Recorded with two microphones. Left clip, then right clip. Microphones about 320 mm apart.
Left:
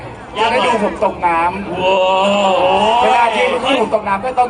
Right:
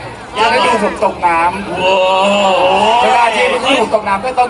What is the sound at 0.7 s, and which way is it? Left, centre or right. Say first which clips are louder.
Speech: right 2 dB; centre.